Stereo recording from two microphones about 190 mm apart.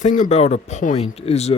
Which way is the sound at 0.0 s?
40° left (ahead or behind).